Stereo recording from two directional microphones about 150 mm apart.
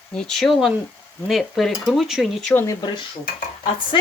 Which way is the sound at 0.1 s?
5° left (ahead or behind).